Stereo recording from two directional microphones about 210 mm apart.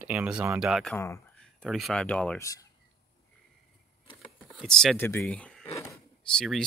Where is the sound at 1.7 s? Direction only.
Centre (ahead or behind).